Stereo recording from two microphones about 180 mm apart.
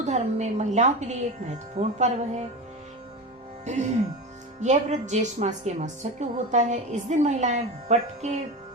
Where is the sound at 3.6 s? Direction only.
40° right (ahead or behind).